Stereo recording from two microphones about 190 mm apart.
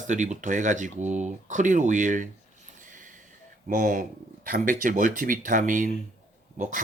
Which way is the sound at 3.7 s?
45° right (ahead or behind).